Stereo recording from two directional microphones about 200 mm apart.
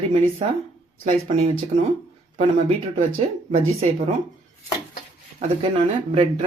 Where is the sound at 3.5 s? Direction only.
35° right (ahead or behind).